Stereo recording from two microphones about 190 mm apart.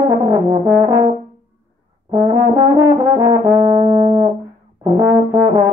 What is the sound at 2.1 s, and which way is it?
Brass instrument, 15° right (ahead or behind).